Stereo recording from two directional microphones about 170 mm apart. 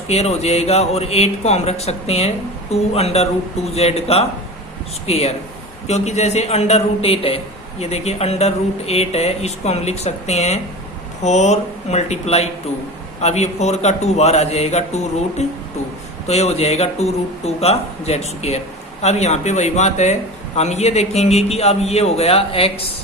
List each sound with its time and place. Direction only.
0.1 s a man's voice: 40° left (ahead or behind)